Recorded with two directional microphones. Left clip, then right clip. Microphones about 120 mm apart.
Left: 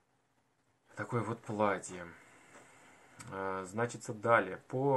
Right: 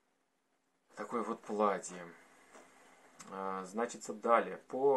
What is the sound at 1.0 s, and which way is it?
Speech, 25° left (ahead or behind).